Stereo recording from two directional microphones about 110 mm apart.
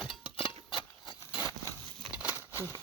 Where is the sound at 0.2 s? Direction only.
50° left (ahead or behind).